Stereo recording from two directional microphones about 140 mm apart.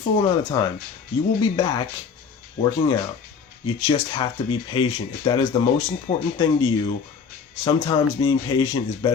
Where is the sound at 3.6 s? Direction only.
35° left (ahead or behind).